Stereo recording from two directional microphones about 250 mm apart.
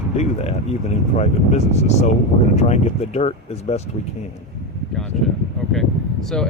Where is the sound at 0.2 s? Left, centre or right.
Left.